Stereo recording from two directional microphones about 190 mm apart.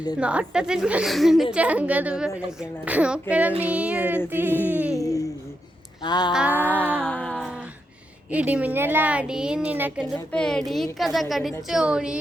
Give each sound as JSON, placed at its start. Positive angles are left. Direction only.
{"t": 0.2, "sound": "a woman's voice", "side_deg": -5}
{"t": 4.5, "sound": "a sound", "side_deg": 10}
{"t": 6.3, "sound": "a woman's voice", "side_deg": -5}
{"t": 6.6, "sound": "a sound", "side_deg": 10}
{"t": 8.3, "sound": "a child's voice", "side_deg": -5}
{"t": 10.3, "sound": "a woman's voice", "side_deg": 5}